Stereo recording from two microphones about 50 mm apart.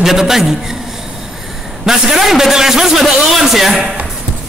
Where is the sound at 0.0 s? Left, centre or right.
Centre.